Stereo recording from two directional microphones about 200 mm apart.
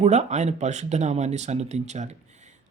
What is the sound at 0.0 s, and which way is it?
Speech, 35° right (ahead or behind).